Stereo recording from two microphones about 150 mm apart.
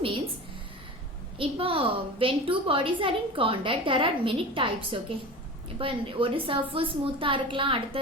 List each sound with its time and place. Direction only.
1.4 s a woman's voice: 35° right (ahead or behind)